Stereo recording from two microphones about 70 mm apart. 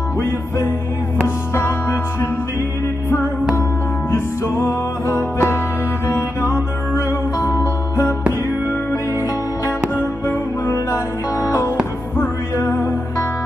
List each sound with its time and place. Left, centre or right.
1.2 s music: left
4.1 s music: left
9.9 s music: left